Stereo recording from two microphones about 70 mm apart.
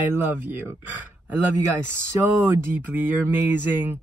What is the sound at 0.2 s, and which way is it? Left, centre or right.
Speech, right.